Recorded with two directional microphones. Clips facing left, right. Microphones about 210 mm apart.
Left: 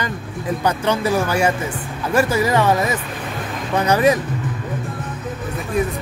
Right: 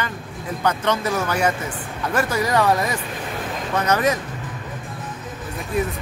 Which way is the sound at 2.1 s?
5° left (ahead or behind).